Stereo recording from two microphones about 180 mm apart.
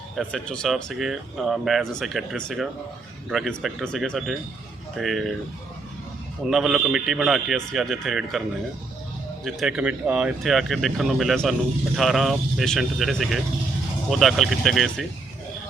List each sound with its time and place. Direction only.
0.2 s speech: 5° left (ahead or behind)
6.4 s speech: centre (ahead or behind)